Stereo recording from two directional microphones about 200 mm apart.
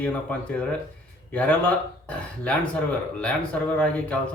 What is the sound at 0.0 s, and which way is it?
Speech, 5° left (ahead or behind).